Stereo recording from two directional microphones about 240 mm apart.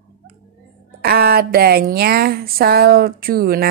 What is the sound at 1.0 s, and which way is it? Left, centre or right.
Speech, right.